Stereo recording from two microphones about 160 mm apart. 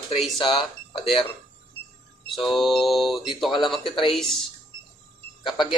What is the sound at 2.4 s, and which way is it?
A man's voice, centre (ahead or behind).